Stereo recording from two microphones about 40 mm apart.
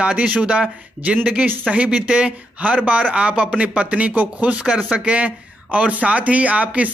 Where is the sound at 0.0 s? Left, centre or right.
Right.